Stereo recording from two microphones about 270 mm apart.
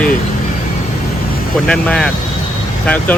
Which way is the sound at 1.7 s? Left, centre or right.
Centre.